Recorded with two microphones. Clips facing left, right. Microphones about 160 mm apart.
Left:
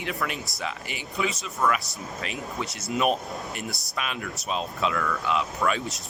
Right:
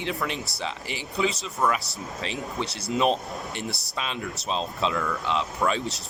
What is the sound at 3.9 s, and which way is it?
Speech, 25° right (ahead or behind).